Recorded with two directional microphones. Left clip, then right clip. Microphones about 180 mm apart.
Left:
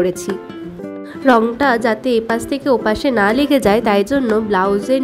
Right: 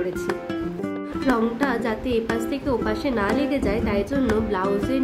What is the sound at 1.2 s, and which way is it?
A woman's voice, 40° left (ahead or behind).